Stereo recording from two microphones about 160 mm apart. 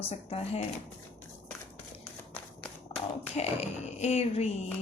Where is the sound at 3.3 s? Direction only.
45° left (ahead or behind).